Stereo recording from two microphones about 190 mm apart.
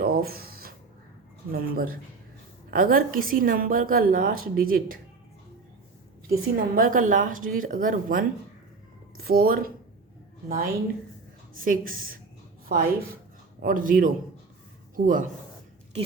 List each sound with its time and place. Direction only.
0.0 s a sound: 50° right (ahead or behind)
1.5 s a woman's voice: 50° right (ahead or behind)
6.2 s a woman's voice: 50° right (ahead or behind)
11.5 s a woman's voice: 45° right (ahead or behind)